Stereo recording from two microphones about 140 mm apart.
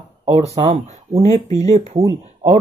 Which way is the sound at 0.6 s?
40° right (ahead or behind).